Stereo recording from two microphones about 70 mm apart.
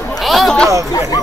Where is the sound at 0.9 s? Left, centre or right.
Left.